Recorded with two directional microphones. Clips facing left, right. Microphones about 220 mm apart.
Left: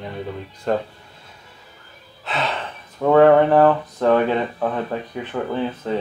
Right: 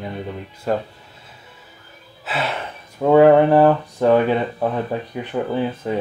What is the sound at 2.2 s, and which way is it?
Speech, 5° right (ahead or behind).